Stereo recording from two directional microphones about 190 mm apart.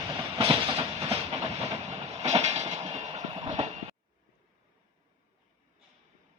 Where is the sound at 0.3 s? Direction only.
30° right (ahead or behind).